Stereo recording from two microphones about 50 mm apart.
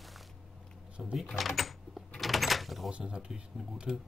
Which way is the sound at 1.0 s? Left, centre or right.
Centre.